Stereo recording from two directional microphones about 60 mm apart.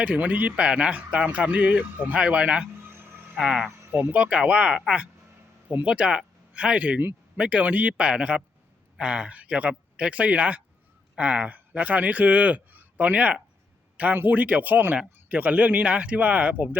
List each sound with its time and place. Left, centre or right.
0.0 s speech: right
2.9 s a sound: right
3.4 s speech: centre
4.1 s speech: centre
13.9 s a sound: right
14.2 s speech: right